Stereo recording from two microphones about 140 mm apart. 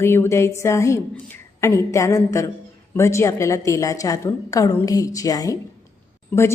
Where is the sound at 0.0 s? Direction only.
15° left (ahead or behind).